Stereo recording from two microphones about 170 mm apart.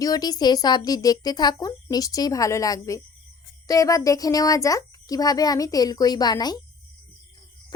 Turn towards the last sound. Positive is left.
turn(degrees=25)  # may be behind; listen again after turning